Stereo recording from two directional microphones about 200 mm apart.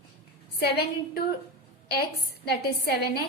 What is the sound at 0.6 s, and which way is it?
A woman's voice, 55° left (ahead or behind).